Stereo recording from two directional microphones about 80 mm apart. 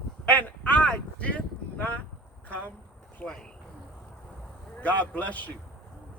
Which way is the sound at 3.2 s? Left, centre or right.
Centre.